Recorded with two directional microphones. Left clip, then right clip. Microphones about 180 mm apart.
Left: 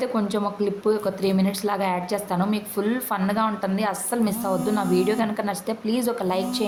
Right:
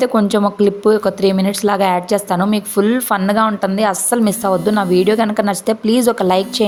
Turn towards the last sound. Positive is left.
turn(degrees=-40)  # may be behind; listen again after turning